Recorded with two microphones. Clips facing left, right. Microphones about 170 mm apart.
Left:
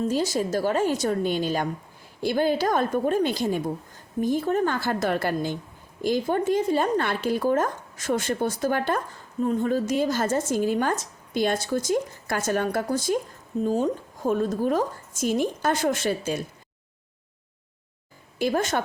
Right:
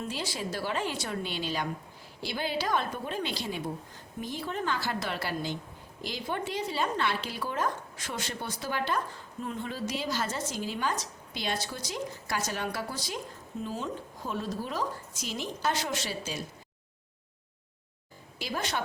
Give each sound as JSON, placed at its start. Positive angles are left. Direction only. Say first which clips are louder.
{"t": 0.0, "sound": "speech", "louder": "left 11 dB", "side_deg": 45}
{"t": 18.3, "sound": "speech", "louder": "left 10 dB", "side_deg": 50}